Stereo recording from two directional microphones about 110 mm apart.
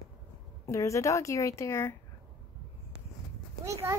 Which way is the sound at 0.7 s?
30° left (ahead or behind).